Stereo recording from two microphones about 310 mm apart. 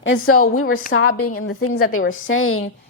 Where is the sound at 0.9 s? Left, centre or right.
Left.